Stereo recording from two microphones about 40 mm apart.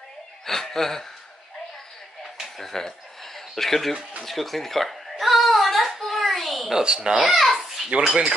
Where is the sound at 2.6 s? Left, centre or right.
Centre.